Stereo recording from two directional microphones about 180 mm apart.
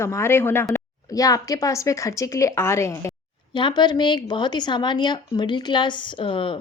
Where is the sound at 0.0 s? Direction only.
15° left (ahead or behind).